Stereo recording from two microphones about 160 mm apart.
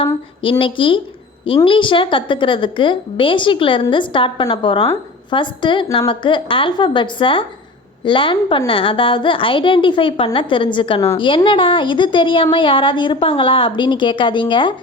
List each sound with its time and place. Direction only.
0.6 s a woman's voice: 35° left (ahead or behind)